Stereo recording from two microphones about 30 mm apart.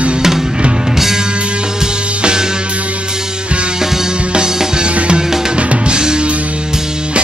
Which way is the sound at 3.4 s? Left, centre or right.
Right.